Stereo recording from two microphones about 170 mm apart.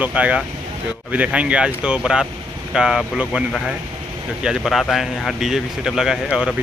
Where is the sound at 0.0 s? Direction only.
10° right (ahead or behind).